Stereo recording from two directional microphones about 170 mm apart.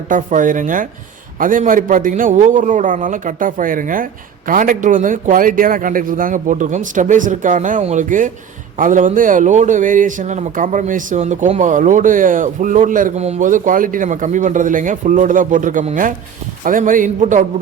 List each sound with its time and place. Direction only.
0.1 s speech: 50° right (ahead or behind)